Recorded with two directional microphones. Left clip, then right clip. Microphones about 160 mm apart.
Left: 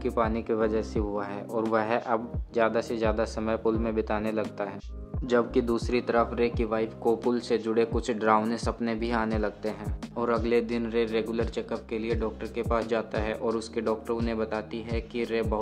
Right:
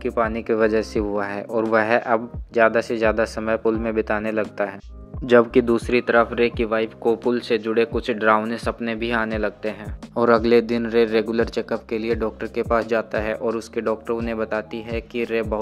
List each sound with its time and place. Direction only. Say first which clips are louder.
0.0 s speech: right 5 dB; 15° right (ahead or behind)
5.9 s speech: right 8 dB; 15° right (ahead or behind)
10.1 s speech: right 10 dB; 40° right (ahead or behind); by 15.6 s 20° right (ahead or behind)